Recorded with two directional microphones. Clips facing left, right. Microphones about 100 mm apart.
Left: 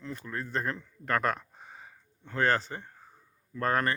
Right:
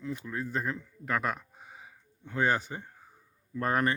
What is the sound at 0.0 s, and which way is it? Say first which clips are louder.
Speech: right 2 dB; 10° right (ahead or behind).